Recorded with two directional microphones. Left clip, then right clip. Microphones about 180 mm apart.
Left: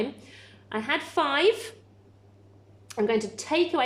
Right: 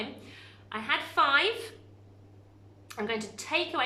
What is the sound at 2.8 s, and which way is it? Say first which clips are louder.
Speech: left 8 dB; 35° left (ahead or behind).